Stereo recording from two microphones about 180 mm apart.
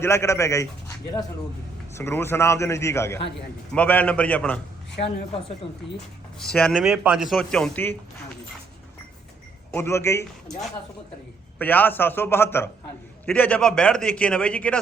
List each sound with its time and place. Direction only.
0.0 s a man's voice: 15° left (ahead or behind)
5.6 s speech: 30° left (ahead or behind)
6.5 s speech: 5° left (ahead or behind)
9.7 s a man's voice: 15° left (ahead or behind)
11.6 s a man's voice: 10° left (ahead or behind)